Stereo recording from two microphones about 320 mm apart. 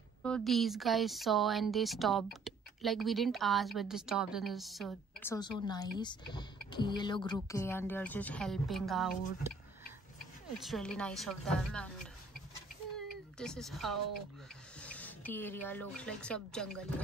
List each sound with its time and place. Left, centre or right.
0.2 s speech: centre
10.6 s speech: centre
13.4 s speech: centre